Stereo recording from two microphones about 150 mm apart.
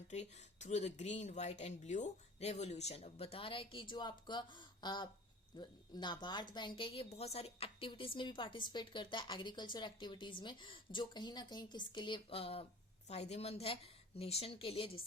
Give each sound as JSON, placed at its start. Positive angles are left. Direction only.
{"t": 0.1, "sound": "speech", "side_deg": 50}